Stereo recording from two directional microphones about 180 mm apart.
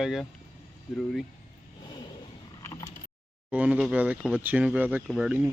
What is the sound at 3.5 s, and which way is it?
Speech, 10° right (ahead or behind).